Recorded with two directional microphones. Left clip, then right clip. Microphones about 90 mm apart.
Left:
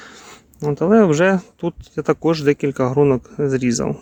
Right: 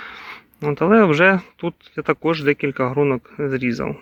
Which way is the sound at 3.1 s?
70° left (ahead or behind).